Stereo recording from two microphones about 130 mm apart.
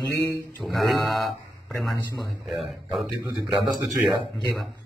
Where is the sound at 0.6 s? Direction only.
Centre (ahead or behind).